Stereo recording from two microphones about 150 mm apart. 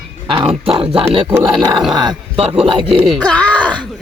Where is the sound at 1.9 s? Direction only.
30° right (ahead or behind).